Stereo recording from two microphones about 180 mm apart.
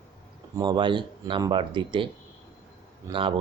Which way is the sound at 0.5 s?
25° right (ahead or behind).